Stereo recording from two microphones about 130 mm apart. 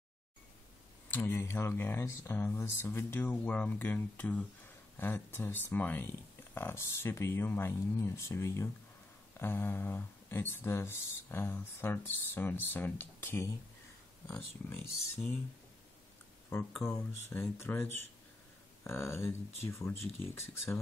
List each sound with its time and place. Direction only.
1.1 s speech: 20° left (ahead or behind)
16.5 s speech: 15° left (ahead or behind)